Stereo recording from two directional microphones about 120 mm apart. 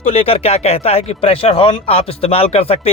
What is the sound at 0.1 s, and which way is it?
A man's voice, 55° left (ahead or behind).